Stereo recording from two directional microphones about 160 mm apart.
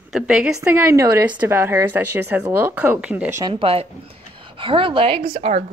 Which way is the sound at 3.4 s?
30° right (ahead or behind).